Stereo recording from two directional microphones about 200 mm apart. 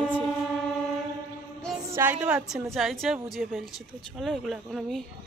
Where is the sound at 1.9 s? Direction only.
10° right (ahead or behind).